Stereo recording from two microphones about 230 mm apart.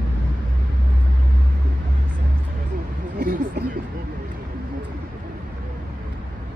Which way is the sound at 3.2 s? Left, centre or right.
Right.